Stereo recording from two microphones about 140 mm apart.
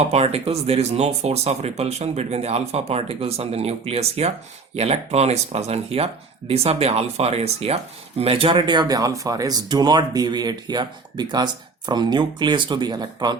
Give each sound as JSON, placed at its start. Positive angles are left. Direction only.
{"t": 0.1, "sound": "speech", "side_deg": -50}